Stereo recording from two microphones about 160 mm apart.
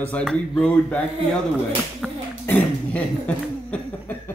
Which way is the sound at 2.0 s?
Centre (ahead or behind).